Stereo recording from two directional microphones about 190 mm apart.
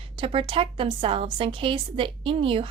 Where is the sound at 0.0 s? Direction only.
30° right (ahead or behind).